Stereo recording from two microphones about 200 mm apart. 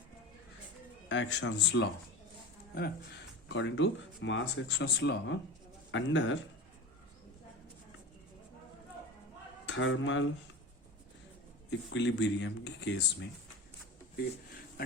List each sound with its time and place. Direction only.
1.0 s speech: 65° left (ahead or behind)
3.5 s speech: 70° left (ahead or behind)
9.6 s speech: 70° left (ahead or behind)
11.9 s speech: 60° left (ahead or behind)